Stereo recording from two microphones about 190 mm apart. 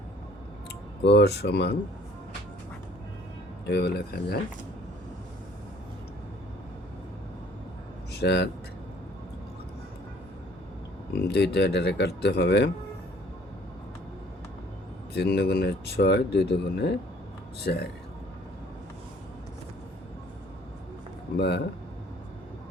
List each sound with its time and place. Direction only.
1.0 s speech: 65° left (ahead or behind)
3.7 s speech: 60° left (ahead or behind)
8.1 s speech: 60° left (ahead or behind)
11.1 s speech: 60° left (ahead or behind)
15.1 s speech: 60° left (ahead or behind)
21.3 s speech: 60° left (ahead or behind)